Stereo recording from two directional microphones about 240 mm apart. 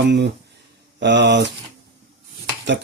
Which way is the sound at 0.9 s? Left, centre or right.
Right.